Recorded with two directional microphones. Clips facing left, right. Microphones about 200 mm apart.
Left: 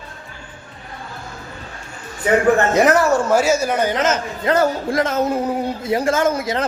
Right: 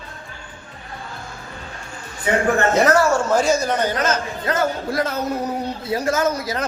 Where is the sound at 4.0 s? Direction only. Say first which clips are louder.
Left 2 dB; 25° left (ahead or behind).